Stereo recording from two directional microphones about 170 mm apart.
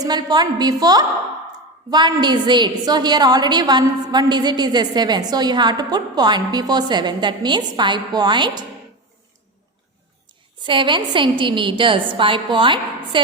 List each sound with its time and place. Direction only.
0.0 s a woman's voice: 25° right (ahead or behind)
10.6 s a woman's voice: 30° right (ahead or behind)